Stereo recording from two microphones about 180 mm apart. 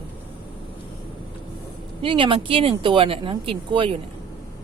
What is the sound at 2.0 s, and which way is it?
Speech, 30° right (ahead or behind).